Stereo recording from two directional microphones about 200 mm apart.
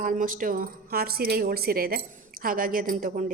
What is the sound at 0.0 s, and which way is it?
A woman's voice, 45° right (ahead or behind).